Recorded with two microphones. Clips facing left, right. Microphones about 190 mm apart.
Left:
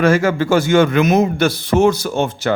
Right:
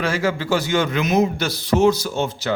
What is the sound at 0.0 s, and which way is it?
Speech, 50° left (ahead or behind).